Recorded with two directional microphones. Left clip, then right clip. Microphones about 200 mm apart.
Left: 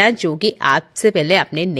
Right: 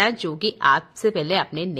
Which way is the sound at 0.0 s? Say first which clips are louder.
Left 7 dB; 35° left (ahead or behind).